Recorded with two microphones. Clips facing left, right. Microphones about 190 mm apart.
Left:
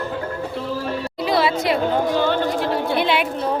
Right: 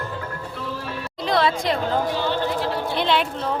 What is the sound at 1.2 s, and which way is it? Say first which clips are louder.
Chatter: left 1 dB; 5° left (ahead or behind).